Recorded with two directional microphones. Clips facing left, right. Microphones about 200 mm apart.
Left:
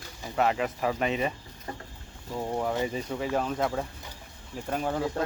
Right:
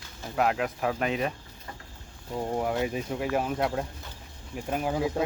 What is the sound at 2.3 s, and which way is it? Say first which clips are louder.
Speech: right 1 dB; 10° right (ahead or behind).